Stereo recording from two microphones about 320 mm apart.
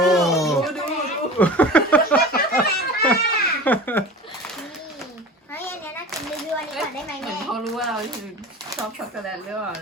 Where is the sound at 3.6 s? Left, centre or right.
Centre.